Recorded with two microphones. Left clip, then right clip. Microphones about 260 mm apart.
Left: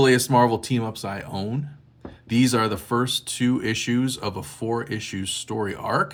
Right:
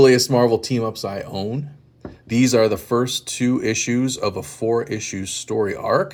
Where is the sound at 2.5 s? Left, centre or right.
Left.